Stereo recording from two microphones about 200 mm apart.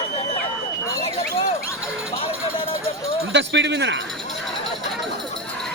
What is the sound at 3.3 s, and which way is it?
Speech, 65° right (ahead or behind).